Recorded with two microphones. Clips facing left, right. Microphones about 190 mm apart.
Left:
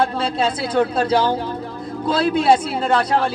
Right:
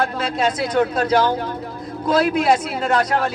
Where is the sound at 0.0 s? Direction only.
30° left (ahead or behind).